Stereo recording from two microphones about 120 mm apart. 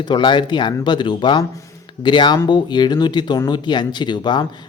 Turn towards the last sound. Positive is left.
turn(degrees=40)  # may be behind; listen again after turning